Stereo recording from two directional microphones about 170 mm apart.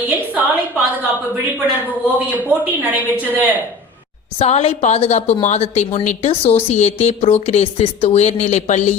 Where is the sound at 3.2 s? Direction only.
10° right (ahead or behind).